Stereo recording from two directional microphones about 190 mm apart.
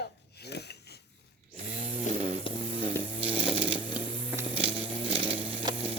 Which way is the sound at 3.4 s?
5° right (ahead or behind).